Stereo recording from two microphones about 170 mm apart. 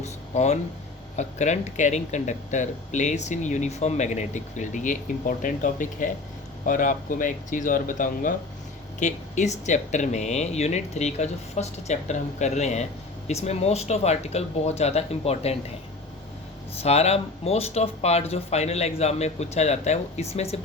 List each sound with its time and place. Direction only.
0.0 s a sound: 40° left (ahead or behind)
1.1 s speech: 45° left (ahead or behind)
16.8 s speech: 40° left (ahead or behind)